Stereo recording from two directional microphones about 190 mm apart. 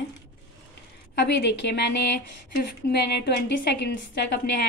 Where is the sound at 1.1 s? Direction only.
60° left (ahead or behind).